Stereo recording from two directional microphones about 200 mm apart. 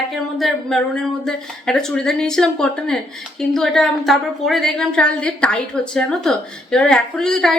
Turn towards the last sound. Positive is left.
turn(degrees=0)  # may be behind; listen again after turning